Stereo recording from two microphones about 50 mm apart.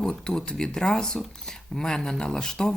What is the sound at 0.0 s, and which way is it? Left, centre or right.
Speech, centre.